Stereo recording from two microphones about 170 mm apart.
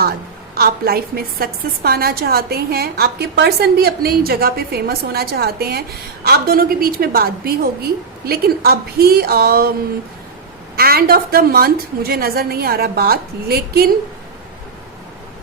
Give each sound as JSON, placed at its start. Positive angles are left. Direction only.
{"t": 0.5, "sound": "a woman's voice", "side_deg": -65}
{"t": 10.8, "sound": "a woman's voice", "side_deg": -65}